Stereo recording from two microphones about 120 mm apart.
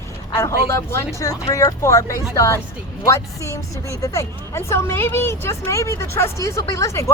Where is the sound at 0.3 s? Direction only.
25° left (ahead or behind).